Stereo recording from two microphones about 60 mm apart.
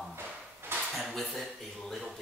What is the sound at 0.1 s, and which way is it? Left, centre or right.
Drawer open or close, right.